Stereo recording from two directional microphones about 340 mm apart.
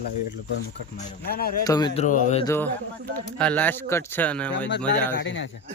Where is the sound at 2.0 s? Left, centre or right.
Left.